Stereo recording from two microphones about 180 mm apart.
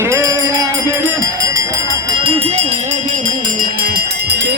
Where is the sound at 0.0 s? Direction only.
15° right (ahead or behind).